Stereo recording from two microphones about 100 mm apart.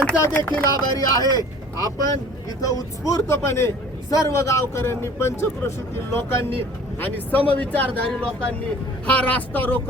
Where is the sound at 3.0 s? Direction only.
30° left (ahead or behind).